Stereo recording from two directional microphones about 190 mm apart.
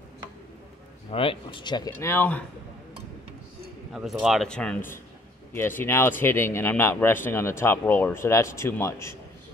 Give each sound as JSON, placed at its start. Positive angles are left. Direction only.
{"t": 1.1, "sound": "speech", "side_deg": 30}
{"t": 3.9, "sound": "speech", "side_deg": 0}